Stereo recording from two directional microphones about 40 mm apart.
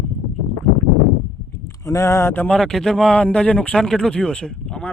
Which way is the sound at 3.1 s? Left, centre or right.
Left.